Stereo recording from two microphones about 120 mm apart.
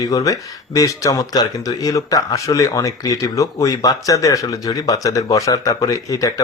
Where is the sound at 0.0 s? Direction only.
30° left (ahead or behind).